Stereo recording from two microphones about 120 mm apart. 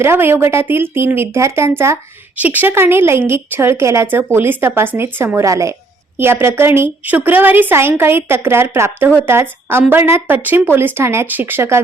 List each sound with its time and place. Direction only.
0.0 s a woman's voice: 20° right (ahead or behind)